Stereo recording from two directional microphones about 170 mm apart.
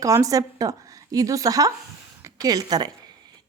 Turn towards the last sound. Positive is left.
turn(degrees=-25)  # may be behind; listen again after turning